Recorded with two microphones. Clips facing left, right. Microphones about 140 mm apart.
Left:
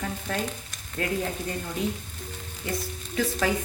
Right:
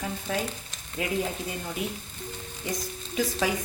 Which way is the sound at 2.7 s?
15° right (ahead or behind).